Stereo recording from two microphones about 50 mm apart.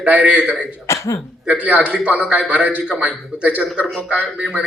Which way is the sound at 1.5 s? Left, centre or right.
Right.